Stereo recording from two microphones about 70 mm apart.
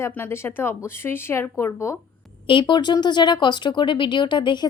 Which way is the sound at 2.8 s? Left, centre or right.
Left.